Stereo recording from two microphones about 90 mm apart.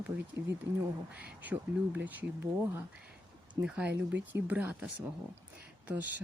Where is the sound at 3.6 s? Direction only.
10° right (ahead or behind).